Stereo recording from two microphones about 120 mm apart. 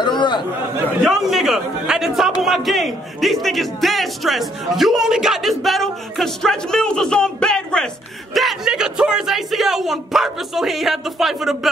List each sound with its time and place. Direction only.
0.0 s speech: 40° left (ahead or behind)
1.0 s a man's voice: 5° right (ahead or behind)